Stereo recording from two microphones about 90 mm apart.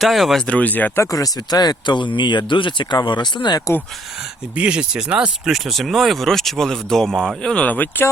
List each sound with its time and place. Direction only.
0.0 s speech: centre (ahead or behind)
0.4 s speech: 15° left (ahead or behind)
0.9 s speech: 40° left (ahead or behind); by 3.6 s 55° left (ahead or behind)
4.5 s speech: 10° right (ahead or behind); by 8.0 s 20° left (ahead or behind)